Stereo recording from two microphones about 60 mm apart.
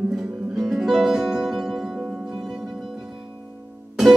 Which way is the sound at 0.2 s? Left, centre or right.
Centre.